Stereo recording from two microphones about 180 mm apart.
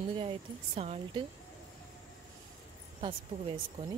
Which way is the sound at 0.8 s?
35° right (ahead or behind).